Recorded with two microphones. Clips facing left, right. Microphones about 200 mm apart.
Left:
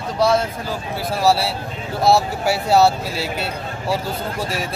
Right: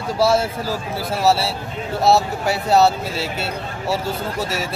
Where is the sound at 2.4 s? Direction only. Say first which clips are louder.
Left 1 dB; centre (ahead or behind).